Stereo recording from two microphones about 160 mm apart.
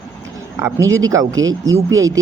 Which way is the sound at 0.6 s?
20° right (ahead or behind).